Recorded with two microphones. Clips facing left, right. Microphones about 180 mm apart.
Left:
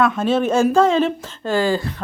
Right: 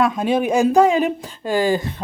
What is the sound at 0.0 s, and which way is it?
Speech, 15° right (ahead or behind).